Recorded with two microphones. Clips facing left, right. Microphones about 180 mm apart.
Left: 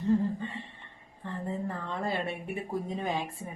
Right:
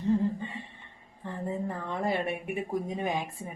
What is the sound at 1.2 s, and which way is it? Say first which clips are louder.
Speech: right 1 dB; 15° right (ahead or behind).